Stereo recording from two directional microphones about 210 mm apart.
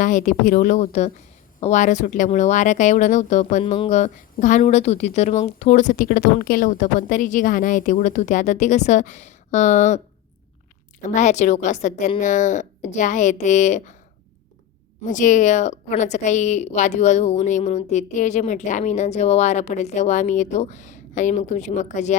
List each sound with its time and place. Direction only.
0.0 s speech: 35° left (ahead or behind)
11.1 s speech: 35° left (ahead or behind)
15.0 s speech: 35° left (ahead or behind)